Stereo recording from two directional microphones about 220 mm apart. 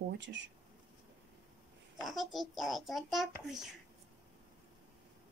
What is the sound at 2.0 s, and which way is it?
A child's voice, centre (ahead or behind).